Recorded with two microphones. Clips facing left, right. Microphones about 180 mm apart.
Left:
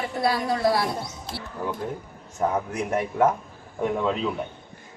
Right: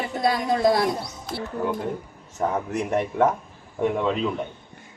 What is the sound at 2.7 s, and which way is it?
Speech, centre (ahead or behind).